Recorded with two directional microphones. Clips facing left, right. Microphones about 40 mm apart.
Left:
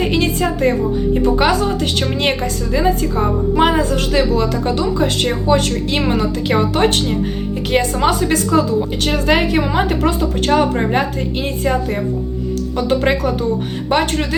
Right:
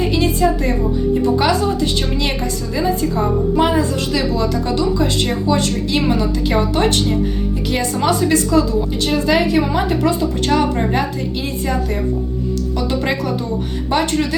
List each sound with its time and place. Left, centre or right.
0.0 s a woman's voice: left